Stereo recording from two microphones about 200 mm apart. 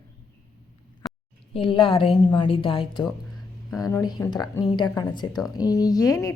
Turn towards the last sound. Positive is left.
turn(degrees=20)  # may be behind; listen again after turning